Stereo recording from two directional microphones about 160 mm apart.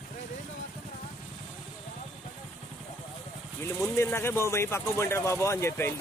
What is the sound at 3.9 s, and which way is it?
Speech, 15° left (ahead or behind).